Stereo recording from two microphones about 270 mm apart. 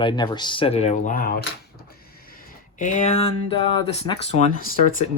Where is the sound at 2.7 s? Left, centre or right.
Left.